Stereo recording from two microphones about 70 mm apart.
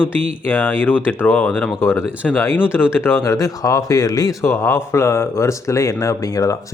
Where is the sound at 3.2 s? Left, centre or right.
Left.